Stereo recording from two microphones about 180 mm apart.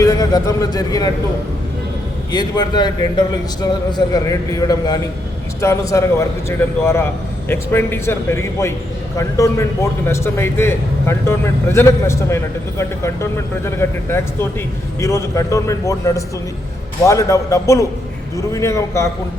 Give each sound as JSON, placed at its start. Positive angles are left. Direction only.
{"t": 0.0, "sound": "speech", "side_deg": 20}
{"t": 2.3, "sound": "a man's voice", "side_deg": 25}